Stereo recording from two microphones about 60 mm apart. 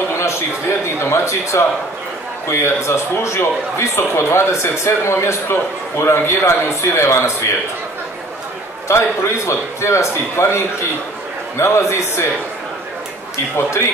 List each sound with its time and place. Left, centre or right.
0.8 s a man's voice: left
8.8 s a man's voice: left
13.6 s a man's voice: left